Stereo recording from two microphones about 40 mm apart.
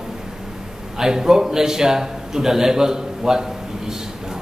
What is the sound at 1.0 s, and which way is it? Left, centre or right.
A man's voice, centre.